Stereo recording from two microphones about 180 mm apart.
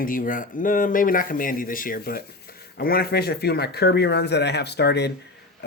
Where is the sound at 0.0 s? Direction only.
50° left (ahead or behind).